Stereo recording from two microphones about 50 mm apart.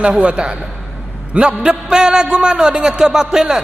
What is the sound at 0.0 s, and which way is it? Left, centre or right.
A man's voice, right.